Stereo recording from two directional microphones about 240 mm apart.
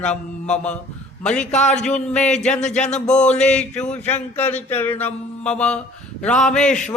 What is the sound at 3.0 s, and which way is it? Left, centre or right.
Speech, left.